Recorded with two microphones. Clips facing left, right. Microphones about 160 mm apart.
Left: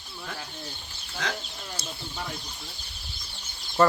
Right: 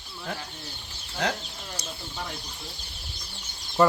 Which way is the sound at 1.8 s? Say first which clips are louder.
Even; 15° right (ahead or behind).